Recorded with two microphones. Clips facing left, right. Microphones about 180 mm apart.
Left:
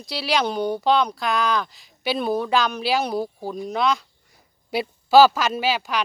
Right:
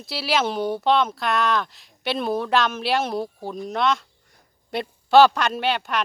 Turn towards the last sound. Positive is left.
turn(degrees=0)  # may be behind; listen again after turning